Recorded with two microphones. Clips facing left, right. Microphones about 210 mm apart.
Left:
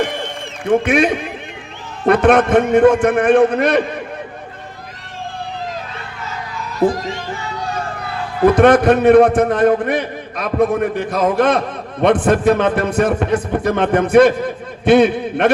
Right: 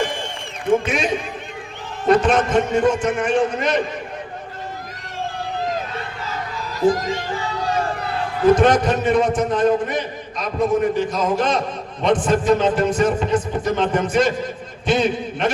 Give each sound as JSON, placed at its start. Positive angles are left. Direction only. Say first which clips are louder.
{"t": 0.7, "sound": "a man's voice", "louder": "left 4 dB", "side_deg": 60}
{"t": 8.4, "sound": "a man's voice", "louder": "left 4 dB", "side_deg": 60}